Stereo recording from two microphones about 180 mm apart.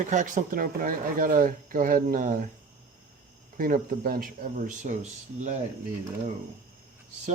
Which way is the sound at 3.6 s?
50° right (ahead or behind).